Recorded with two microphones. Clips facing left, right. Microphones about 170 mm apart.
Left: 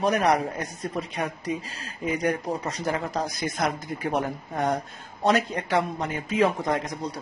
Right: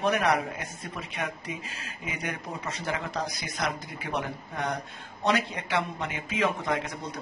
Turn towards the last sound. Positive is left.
turn(degrees=35)  # may be behind; listen again after turning